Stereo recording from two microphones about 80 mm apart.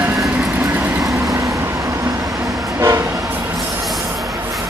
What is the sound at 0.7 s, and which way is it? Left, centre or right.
Vehicle, right.